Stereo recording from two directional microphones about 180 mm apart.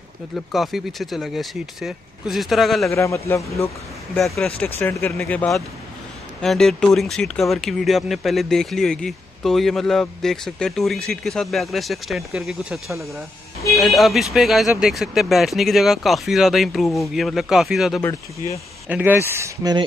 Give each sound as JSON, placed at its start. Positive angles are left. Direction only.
{"t": 0.5, "sound": "speech", "side_deg": 0}
{"t": 2.9, "sound": "speech", "side_deg": 15}
{"t": 4.2, "sound": "speech", "side_deg": 5}